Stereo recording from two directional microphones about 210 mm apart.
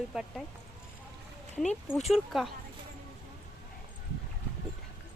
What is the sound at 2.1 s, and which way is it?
Speech, centre (ahead or behind).